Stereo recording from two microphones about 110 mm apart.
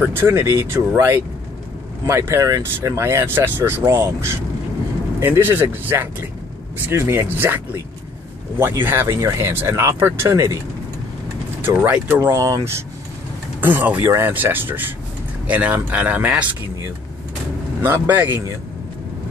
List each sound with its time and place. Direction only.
0.0 s speech: 20° right (ahead or behind)
11.6 s speech: 15° right (ahead or behind)
12.2 s speech: 30° right (ahead or behind); by 16.4 s 10° right (ahead or behind)
17.8 s speech: 20° right (ahead or behind)